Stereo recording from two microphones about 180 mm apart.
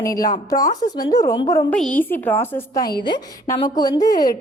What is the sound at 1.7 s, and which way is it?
A woman's voice, 5° left (ahead or behind).